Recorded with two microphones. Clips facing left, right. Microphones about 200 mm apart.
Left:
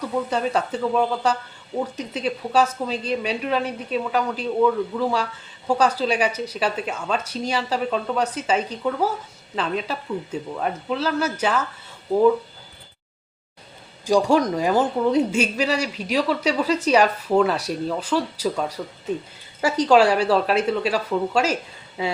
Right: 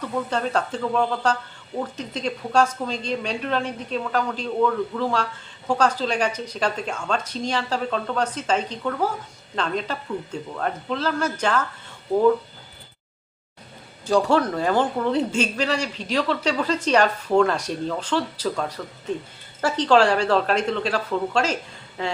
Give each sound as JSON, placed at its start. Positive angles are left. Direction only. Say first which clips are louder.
{"t": 0.0, "sound": "a woman's voice", "louder": "left 2 dB", "side_deg": 10}
{"t": 14.0, "sound": "a woman's voice", "louder": "left 2 dB", "side_deg": 10}